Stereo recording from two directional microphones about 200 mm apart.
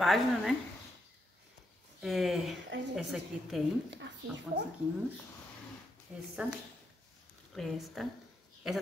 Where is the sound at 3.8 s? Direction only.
60° right (ahead or behind).